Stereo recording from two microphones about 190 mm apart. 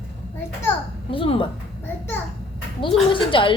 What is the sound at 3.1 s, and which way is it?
Speech, 25° left (ahead or behind).